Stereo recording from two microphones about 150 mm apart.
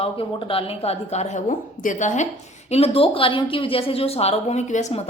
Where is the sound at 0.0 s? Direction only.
35° left (ahead or behind).